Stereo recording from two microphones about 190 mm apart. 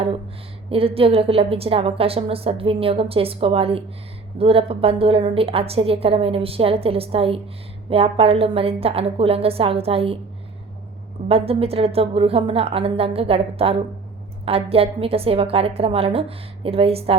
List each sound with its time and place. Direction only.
0.7 s a woman's voice: 30° right (ahead or behind)
11.3 s a woman's voice: 30° right (ahead or behind)